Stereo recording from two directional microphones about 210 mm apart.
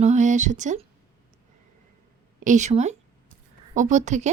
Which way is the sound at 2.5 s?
35° right (ahead or behind).